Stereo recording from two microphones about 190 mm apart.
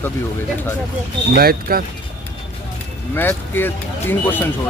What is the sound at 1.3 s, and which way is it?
Speech, 50° right (ahead or behind).